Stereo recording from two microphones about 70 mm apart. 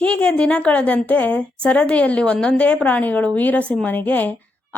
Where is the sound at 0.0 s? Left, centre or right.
Centre.